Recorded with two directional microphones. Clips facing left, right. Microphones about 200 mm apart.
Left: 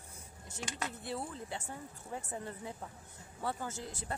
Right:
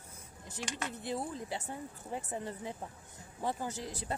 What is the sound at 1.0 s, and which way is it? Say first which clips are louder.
Speech: right 3 dB; 15° right (ahead or behind).